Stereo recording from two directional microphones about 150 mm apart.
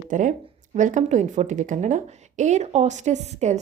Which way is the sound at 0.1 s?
55° right (ahead or behind).